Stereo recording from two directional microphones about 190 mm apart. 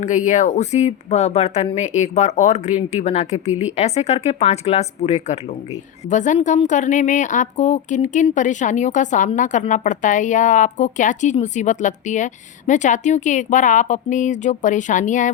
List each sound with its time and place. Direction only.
0.0 s a woman's voice: 40° left (ahead or behind)